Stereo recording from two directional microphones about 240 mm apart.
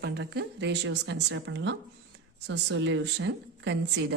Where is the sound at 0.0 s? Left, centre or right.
Right.